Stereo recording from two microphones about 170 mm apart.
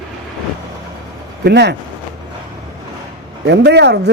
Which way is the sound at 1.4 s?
85° right.